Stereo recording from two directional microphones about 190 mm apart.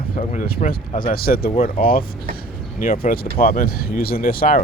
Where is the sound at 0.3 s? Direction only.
45° left (ahead or behind).